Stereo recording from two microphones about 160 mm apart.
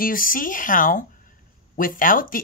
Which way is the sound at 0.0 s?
60° left (ahead or behind).